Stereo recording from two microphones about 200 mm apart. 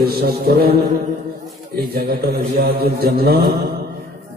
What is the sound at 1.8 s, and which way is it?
A man's voice, 50° right (ahead or behind).